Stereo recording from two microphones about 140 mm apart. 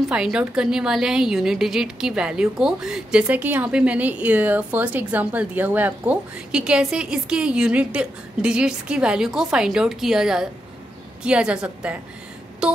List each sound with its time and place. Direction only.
0.1 s a woman's voice: 5° right (ahead or behind)